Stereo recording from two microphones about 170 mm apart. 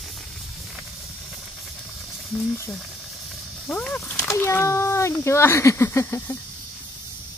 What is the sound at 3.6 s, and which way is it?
Speech, 5° left (ahead or behind).